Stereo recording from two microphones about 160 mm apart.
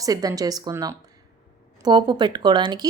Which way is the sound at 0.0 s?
20° right (ahead or behind).